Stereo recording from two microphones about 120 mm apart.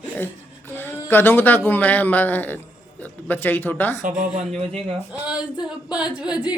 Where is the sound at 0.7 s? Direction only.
20° left (ahead or behind).